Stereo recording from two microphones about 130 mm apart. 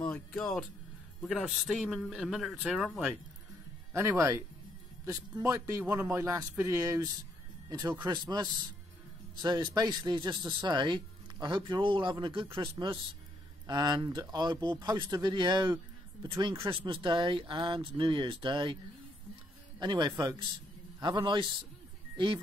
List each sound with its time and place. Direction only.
0.0 s speech: 10° left (ahead or behind)
1.2 s a man's voice: 5° right (ahead or behind)
3.9 s a man's voice: 20° right (ahead or behind)
8.1 s speech: 30° right (ahead or behind)
19.8 s speech: 35° right (ahead or behind)